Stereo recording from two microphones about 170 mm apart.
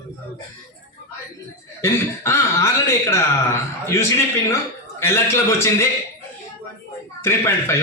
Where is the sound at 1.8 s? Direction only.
15° left (ahead or behind).